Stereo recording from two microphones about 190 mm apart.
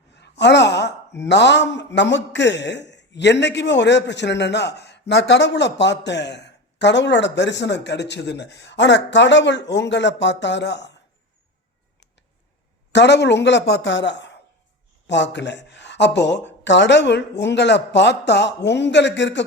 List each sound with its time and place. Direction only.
0.2 s a woman's voice: 65° left (ahead or behind)
12.9 s a woman's voice: 65° left (ahead or behind)